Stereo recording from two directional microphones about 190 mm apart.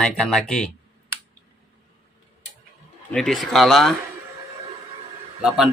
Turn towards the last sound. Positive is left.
turn(degrees=-5)  # may be behind; listen again after turning